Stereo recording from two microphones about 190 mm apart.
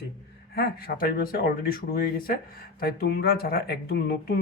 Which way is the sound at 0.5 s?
55° left (ahead or behind).